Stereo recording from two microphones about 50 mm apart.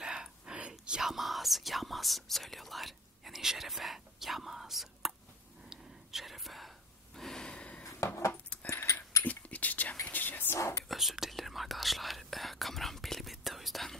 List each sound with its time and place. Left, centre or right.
0.0 s whispering: centre
1.1 s speech: centre
5.7 s whispering: centre
7.2 s gasp: centre
8.0 s a sound: left
8.5 s keys jangling: left
9.2 s a sound: left
10.1 s whispering: left
10.5 s whispering: left
10.9 s whispering: centre